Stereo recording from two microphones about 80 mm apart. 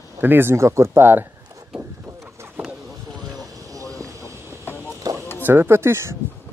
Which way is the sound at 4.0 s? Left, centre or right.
Right.